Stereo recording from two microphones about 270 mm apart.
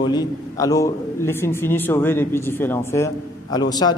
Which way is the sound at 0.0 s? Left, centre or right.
Centre.